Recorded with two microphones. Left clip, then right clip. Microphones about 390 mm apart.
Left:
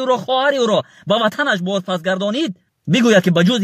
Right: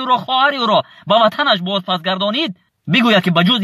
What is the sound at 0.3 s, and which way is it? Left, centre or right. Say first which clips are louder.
Speech: right 1 dB; centre.